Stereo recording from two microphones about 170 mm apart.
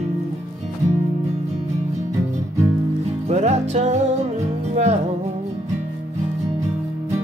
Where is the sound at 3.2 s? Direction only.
40° right (ahead or behind).